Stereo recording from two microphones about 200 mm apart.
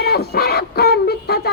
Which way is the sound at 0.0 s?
50° left (ahead or behind).